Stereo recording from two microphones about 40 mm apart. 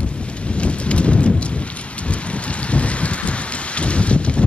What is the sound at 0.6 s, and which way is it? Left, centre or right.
Rain, left.